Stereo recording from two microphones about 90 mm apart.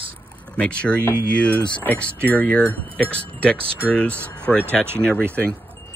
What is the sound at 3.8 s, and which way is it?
Speech, 15° left (ahead or behind).